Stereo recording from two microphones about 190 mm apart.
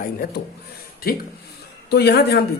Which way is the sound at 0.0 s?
50° left (ahead or behind).